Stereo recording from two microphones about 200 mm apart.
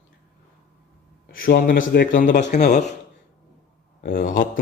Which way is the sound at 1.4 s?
45° left (ahead or behind).